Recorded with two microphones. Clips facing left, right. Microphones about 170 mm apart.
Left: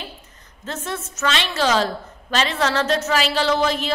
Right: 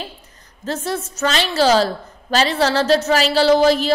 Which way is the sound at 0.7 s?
35° right (ahead or behind).